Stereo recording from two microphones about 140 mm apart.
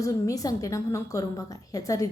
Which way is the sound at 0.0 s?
25° left (ahead or behind).